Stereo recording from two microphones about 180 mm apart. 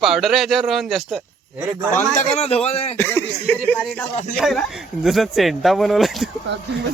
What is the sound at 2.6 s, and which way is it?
Speech, 35° left (ahead or behind).